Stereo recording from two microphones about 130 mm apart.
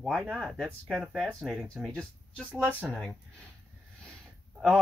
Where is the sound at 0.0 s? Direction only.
5° right (ahead or behind); by 2.9 s 15° left (ahead or behind).